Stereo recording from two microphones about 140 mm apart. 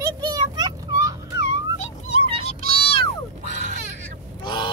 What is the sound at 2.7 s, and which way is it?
Music, 40° left (ahead or behind).